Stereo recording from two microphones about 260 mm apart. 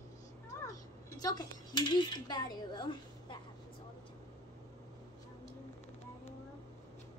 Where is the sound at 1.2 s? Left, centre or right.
Centre.